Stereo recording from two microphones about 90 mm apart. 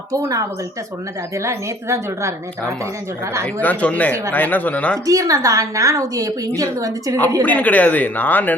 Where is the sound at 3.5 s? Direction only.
20° left (ahead or behind).